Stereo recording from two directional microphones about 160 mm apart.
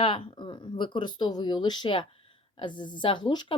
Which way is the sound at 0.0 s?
35° left (ahead or behind).